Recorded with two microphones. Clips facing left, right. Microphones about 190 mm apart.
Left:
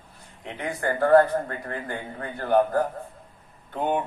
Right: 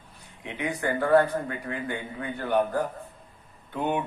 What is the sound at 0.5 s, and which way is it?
Speech, 45° left (ahead or behind).